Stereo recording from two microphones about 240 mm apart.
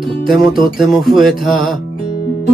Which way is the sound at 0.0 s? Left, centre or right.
Centre.